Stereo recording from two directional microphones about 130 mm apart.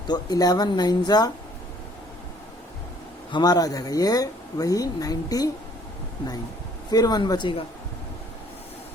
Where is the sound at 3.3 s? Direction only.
30° left (ahead or behind).